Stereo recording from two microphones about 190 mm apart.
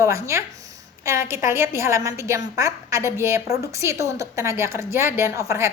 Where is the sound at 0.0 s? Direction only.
15° right (ahead or behind).